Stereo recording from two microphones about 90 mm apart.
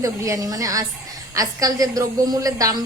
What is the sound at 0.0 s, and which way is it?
A woman's voice, 35° right (ahead or behind).